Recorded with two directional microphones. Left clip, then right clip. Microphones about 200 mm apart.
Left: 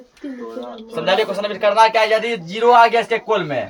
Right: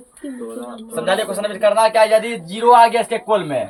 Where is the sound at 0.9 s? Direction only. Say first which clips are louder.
Left 1 dB; 15° left (ahead or behind).